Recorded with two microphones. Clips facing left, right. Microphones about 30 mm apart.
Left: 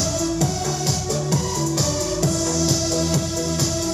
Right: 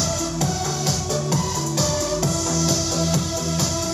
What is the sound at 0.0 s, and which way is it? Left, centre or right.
Music, centre.